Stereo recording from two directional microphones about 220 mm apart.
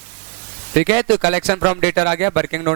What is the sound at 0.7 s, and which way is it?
Speech, 15° right (ahead or behind).